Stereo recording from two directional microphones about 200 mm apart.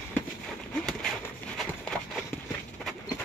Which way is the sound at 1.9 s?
5° left (ahead or behind).